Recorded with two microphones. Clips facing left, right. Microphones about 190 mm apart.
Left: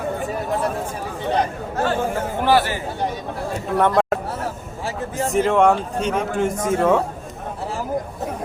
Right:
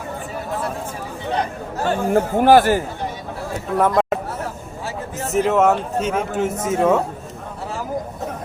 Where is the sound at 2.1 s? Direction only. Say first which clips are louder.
Right 10 dB; 50° right (ahead or behind).